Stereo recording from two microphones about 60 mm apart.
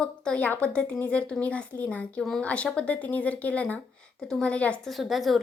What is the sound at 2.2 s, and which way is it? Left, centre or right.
Speech, centre.